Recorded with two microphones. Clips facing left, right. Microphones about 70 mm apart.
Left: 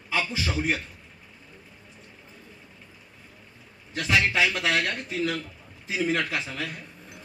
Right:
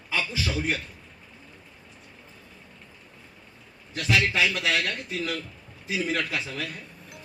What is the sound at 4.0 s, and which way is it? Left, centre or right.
Speech, left.